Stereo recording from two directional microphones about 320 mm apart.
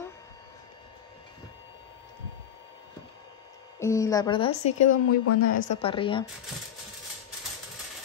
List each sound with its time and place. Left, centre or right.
3.8 s speech: centre
4.8 s a woman's voice: left
5.7 s speech: centre